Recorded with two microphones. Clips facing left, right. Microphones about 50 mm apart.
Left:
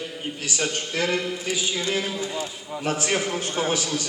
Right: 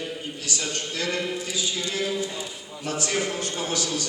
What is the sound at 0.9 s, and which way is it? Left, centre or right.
A man's voice, left.